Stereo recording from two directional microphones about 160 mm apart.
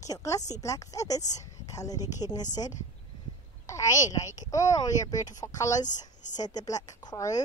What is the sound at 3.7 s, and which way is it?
Speech, 20° left (ahead or behind).